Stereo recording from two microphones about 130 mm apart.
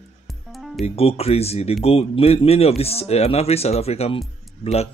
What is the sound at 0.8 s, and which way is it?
Speech, 50° left (ahead or behind).